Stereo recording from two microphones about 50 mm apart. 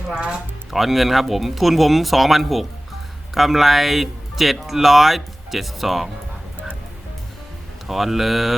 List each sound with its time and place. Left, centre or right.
0.1 s speech: right
0.7 s speech: centre
7.9 s speech: centre